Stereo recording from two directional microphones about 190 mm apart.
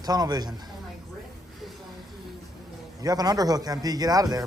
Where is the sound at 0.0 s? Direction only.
20° right (ahead or behind).